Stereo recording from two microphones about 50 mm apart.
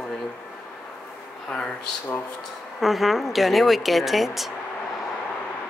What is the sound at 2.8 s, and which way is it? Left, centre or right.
Speech, centre.